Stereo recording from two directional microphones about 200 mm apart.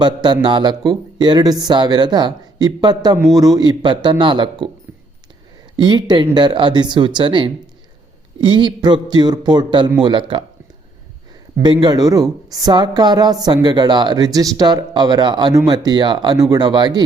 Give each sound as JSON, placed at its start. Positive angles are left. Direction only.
{"t": 0.0, "sound": "a woman's voice", "side_deg": -20}
{"t": 5.7, "sound": "a woman's voice", "side_deg": -20}
{"t": 11.6, "sound": "a woman's voice", "side_deg": -20}